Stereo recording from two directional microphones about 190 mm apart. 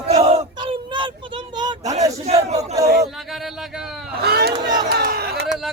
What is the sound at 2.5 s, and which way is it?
Speech, 15° right (ahead or behind).